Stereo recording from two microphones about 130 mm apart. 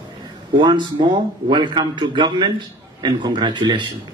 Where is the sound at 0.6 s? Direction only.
35° right (ahead or behind).